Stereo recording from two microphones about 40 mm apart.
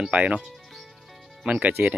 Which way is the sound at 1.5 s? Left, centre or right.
Right.